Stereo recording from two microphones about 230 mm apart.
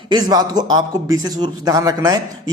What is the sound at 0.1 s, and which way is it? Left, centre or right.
A man's voice, centre.